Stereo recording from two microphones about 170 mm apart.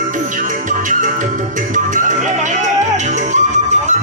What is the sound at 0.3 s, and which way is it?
Music, 50° right (ahead or behind).